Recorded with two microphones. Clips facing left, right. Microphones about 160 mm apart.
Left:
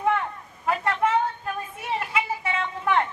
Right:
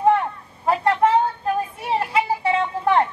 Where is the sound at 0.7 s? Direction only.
35° right (ahead or behind).